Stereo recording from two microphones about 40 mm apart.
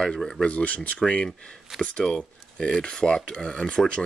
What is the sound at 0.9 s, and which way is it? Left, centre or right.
Speech, left.